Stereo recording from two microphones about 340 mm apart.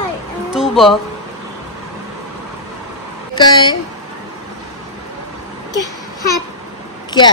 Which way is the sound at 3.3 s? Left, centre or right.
Centre.